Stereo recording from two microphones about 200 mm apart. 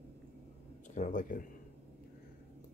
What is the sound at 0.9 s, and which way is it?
Speech, 40° left (ahead or behind).